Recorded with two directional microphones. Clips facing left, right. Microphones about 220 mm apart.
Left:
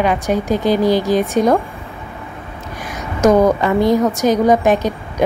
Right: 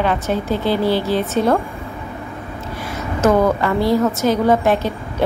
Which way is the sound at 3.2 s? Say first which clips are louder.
Left 3 dB; 15° left (ahead or behind).